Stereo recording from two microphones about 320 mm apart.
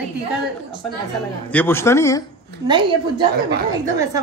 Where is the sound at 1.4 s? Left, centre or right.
Centre.